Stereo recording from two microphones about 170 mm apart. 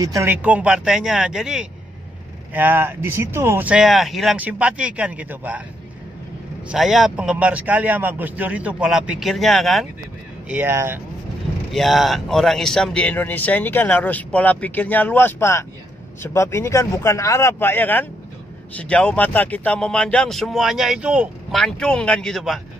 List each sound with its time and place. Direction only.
0.0 s a man's voice: 15° right (ahead or behind)
6.7 s a man's voice: centre (ahead or behind)
10.5 s a man's voice: 10° right (ahead or behind)
11.7 s speech: centre (ahead or behind)
21.5 s speech: 5° left (ahead or behind)